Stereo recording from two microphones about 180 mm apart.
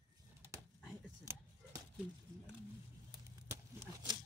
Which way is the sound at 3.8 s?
20° right (ahead or behind).